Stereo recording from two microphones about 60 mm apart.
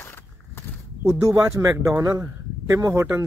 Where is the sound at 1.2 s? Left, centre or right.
Right.